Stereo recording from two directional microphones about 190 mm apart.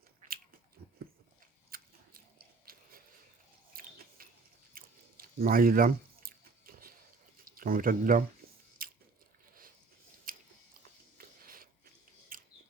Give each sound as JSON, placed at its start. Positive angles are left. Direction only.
{"t": 0.2, "sound": "biting", "side_deg": -40}
{"t": 1.7, "sound": "biting", "side_deg": -50}
{"t": 3.8, "sound": "a sound", "side_deg": -50}
{"t": 4.7, "sound": "chewing", "side_deg": -50}
{"t": 7.4, "sound": "speech", "side_deg": -50}
{"t": 8.8, "sound": "biting", "side_deg": -50}
{"t": 10.3, "sound": "biting", "side_deg": -45}
{"t": 11.2, "sound": "a sound", "side_deg": -50}